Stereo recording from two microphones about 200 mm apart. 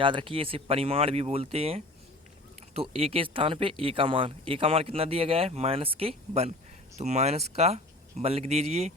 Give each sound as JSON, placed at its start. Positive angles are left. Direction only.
{"t": 0.0, "sound": "speech", "side_deg": -25}